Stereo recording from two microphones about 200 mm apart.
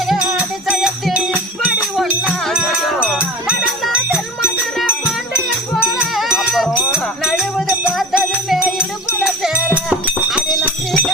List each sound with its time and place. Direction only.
0.1 s music: 5° right (ahead or behind)
5.7 s music: 5° right (ahead or behind)
9.2 s music: 5° right (ahead or behind)